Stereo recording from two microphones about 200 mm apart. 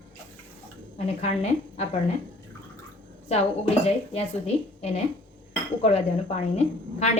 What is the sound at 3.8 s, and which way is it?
A woman's voice, 30° left (ahead or behind).